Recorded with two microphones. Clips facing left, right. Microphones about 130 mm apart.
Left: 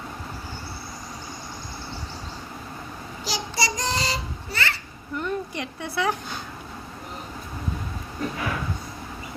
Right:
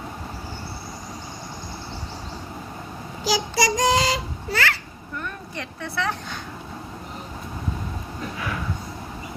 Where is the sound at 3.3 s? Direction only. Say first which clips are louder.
Right 6 dB; 90° right.